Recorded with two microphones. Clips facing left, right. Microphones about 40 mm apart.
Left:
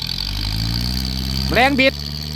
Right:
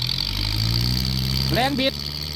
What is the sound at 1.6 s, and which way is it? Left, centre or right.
Speech, left.